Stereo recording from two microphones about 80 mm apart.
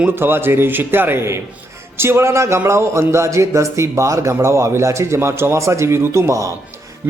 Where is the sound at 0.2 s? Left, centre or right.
Right.